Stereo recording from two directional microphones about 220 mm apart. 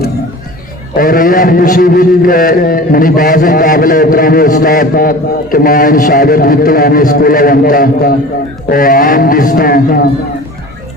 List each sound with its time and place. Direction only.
0.9 s a man's voice: 40° left (ahead or behind)